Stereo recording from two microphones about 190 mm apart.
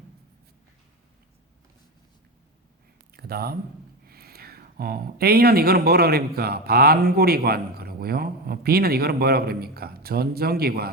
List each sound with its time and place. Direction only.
3.2 s speech: 55° right (ahead or behind)